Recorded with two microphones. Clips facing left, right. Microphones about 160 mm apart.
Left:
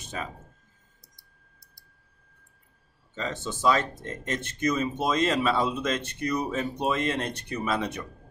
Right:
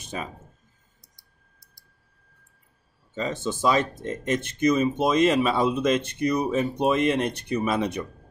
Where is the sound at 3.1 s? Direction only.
15° right (ahead or behind).